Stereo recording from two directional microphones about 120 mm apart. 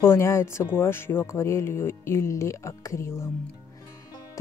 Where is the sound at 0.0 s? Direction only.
20° left (ahead or behind).